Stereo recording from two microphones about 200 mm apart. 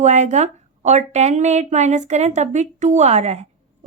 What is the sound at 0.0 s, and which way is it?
A woman's voice, 35° right (ahead or behind).